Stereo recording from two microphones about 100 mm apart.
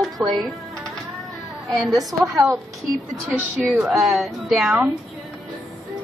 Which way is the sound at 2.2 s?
35° right (ahead or behind).